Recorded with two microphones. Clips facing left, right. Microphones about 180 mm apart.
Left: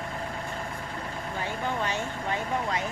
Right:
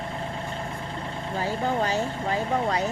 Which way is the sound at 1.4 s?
35° right (ahead or behind).